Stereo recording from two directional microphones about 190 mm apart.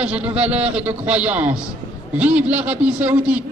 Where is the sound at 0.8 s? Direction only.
5° right (ahead or behind).